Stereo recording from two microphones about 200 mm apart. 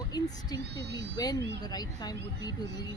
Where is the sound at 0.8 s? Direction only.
55° right (ahead or behind).